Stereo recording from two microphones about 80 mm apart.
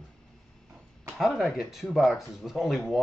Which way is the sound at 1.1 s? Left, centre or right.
Centre.